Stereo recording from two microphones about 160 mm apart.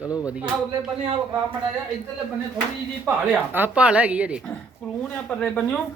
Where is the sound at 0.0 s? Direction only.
20° left (ahead or behind).